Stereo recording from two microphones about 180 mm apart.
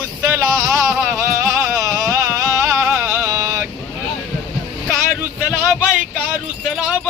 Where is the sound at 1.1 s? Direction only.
15° right (ahead or behind).